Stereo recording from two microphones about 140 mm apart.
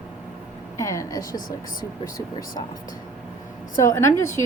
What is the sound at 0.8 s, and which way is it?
Speech, 20° left (ahead or behind).